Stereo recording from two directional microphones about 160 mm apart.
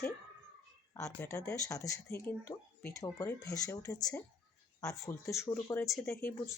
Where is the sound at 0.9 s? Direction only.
20° left (ahead or behind).